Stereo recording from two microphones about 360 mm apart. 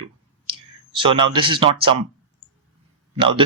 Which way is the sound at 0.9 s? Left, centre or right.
Centre.